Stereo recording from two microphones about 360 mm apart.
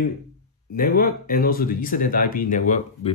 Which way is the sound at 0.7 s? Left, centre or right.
Left.